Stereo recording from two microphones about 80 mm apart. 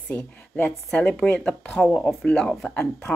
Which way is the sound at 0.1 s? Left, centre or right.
Centre.